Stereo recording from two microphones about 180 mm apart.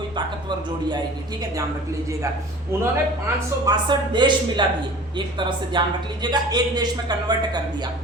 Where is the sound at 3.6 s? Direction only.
25° right (ahead or behind).